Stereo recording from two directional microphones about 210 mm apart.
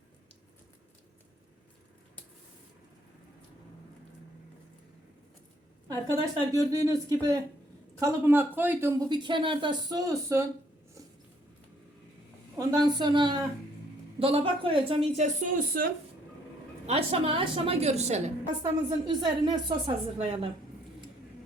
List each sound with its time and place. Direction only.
5.9 s speech: 15° right (ahead or behind)
12.5 s a woman's voice: 20° right (ahead or behind); by 15.9 s 40° right (ahead or behind)
16.8 s a woman's voice: 30° right (ahead or behind)
18.6 s a woman's voice: 20° right (ahead or behind)